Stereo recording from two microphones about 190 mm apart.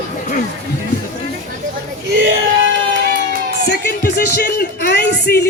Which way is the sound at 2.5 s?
90° right.